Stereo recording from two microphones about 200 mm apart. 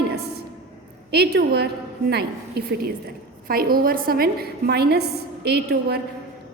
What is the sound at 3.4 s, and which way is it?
A woman's voice, 45° right (ahead or behind).